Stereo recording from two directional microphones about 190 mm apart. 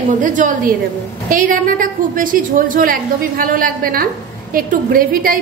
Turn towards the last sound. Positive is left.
turn(degrees=-50)  # may be behind; listen again after turning